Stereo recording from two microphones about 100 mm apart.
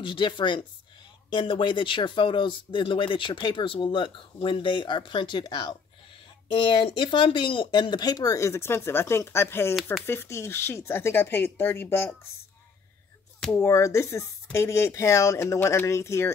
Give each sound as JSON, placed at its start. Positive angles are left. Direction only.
{"t": 0.0, "sound": "speech", "side_deg": 55}
{"t": 13.6, "sound": "speech", "side_deg": 30}